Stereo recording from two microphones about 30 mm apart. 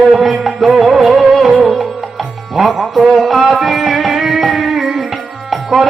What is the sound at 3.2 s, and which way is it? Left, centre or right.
Music, centre.